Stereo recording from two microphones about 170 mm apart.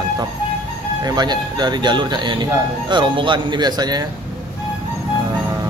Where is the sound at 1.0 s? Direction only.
25° right (ahead or behind).